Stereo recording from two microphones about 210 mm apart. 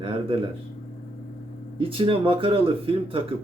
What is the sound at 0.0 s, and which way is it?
Speech, 25° right (ahead or behind).